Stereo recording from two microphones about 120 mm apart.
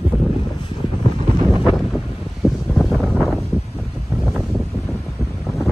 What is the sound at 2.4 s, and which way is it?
Wind noise, centre (ahead or behind).